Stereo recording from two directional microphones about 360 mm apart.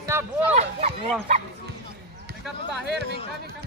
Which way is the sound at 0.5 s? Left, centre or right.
Centre.